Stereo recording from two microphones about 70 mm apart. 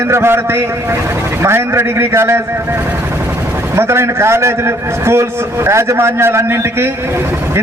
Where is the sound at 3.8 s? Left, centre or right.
Right.